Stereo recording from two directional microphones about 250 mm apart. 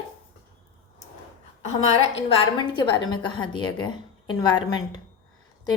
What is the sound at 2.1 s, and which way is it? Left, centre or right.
A woman's voice, left.